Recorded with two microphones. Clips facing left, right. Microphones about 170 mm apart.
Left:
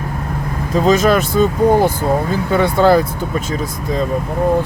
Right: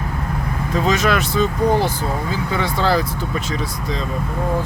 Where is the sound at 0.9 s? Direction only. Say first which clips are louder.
Left 6 dB; 45° left (ahead or behind).